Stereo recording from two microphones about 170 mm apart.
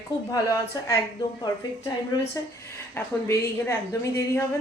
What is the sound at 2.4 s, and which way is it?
A woman's voice, 20° left (ahead or behind).